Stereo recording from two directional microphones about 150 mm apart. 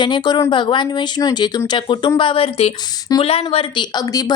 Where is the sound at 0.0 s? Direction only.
30° left (ahead or behind).